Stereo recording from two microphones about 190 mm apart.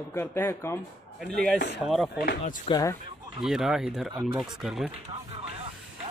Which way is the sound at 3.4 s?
Centre (ahead or behind).